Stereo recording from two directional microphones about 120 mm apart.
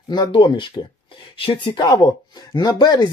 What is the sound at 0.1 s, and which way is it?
Speech, 40° left (ahead or behind).